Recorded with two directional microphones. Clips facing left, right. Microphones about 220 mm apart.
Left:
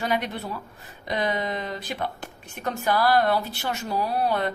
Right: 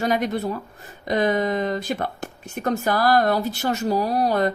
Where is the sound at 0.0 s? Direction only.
45° right (ahead or behind).